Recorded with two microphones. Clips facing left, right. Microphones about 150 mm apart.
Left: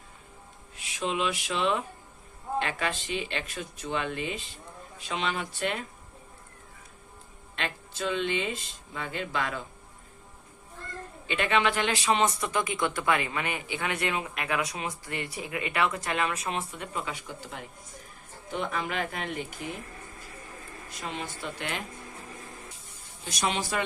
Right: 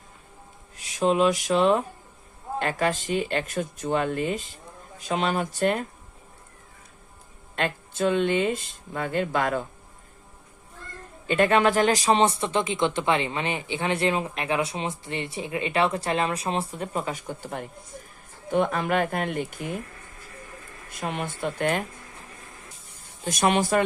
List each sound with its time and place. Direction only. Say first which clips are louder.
0.8 s speech: right 8 dB; 40° right (ahead or behind)
7.5 s speech: right 7 dB; 50° right (ahead or behind)
11.3 s speech: right 6 dB; 40° right (ahead or behind)
20.9 s speech: right 6 dB; 55° right (ahead or behind)
23.2 s speech: right 8 dB; 50° right (ahead or behind)